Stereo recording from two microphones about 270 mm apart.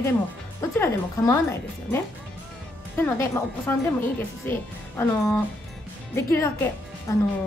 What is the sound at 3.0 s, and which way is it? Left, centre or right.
A woman's voice, centre.